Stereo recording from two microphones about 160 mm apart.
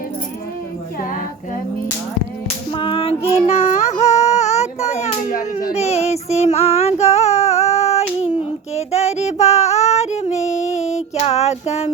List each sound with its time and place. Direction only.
2.7 s child singing: 35° left (ahead or behind)
4.2 s a sound: 45° left (ahead or behind)
5.7 s child singing: 40° left (ahead or behind)